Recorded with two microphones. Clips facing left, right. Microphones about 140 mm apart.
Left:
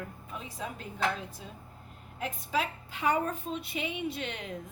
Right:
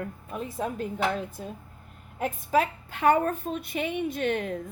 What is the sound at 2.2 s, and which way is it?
A woman's voice, 50° right (ahead or behind).